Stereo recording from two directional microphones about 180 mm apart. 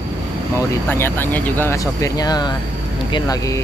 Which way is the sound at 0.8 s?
10° left (ahead or behind).